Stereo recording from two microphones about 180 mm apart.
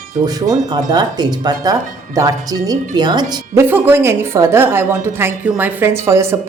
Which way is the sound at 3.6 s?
10° right (ahead or behind).